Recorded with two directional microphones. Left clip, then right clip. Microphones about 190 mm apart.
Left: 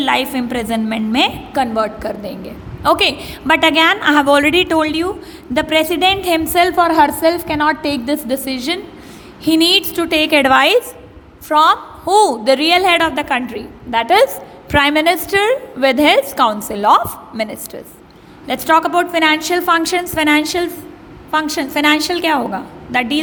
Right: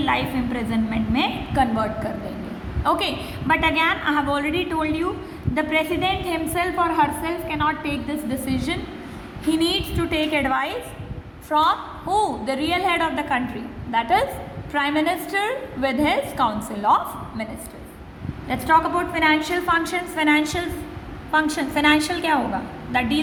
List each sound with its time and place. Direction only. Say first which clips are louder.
0.0 s a woman's voice: left 6 dB; 60° left (ahead or behind); by 23.2 s 35° left (ahead or behind)